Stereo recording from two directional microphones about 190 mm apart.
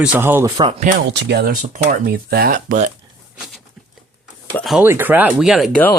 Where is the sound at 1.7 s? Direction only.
50° right (ahead or behind).